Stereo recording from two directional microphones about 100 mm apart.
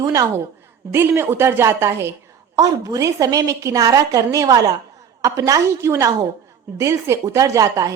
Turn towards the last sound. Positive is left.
turn(degrees=-35)  # may be behind; listen again after turning